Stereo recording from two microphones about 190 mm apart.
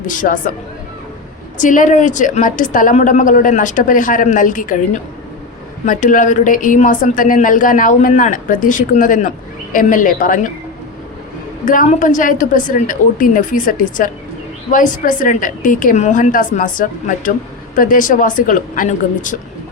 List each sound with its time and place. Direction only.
0.0 s a woman's voice: 45° left (ahead or behind)
1.5 s a woman's voice: 40° left (ahead or behind)
11.6 s a woman's voice: 45° left (ahead or behind)